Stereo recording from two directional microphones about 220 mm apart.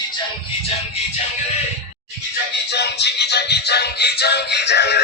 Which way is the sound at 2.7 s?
50° left (ahead or behind).